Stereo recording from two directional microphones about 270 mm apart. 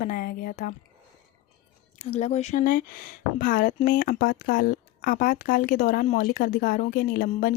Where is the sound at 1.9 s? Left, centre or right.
Left.